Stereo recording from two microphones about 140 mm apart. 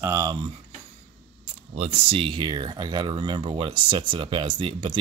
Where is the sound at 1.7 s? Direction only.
45° right (ahead or behind).